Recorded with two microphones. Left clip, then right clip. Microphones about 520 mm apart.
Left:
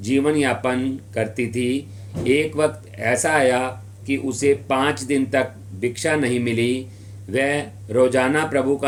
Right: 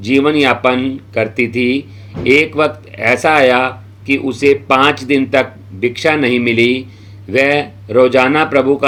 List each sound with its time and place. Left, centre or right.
0.0 s speech: left